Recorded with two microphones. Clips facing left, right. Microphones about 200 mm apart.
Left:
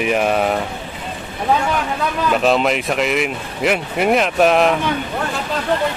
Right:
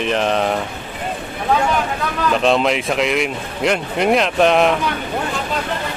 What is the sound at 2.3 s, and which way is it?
A man's voice, 5° left (ahead or behind).